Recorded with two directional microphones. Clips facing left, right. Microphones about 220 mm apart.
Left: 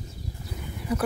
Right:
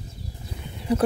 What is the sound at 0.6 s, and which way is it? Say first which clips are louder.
Livestock: right 5 dB; 25° right (ahead or behind).